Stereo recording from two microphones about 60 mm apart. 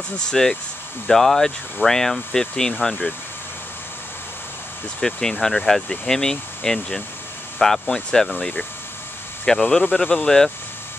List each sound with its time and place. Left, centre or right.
0.3 s speech: centre
5.0 s speech: centre